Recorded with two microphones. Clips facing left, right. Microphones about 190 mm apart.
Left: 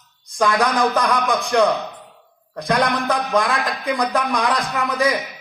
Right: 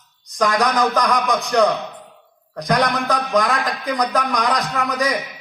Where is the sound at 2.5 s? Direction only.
30° left (ahead or behind).